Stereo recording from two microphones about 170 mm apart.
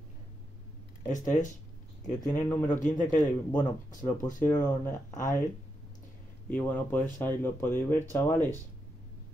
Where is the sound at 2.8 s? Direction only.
50° left (ahead or behind).